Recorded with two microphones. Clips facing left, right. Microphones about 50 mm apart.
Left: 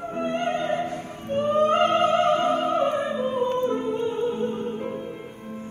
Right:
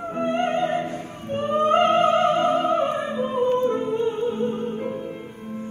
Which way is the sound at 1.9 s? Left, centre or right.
Right.